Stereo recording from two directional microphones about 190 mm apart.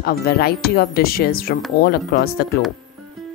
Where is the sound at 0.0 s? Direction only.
50° left (ahead or behind).